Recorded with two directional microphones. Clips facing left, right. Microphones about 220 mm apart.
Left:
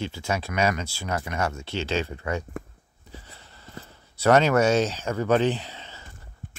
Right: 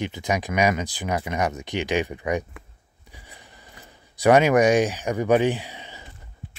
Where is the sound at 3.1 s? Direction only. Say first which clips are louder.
Left 2 dB; 15° right (ahead or behind).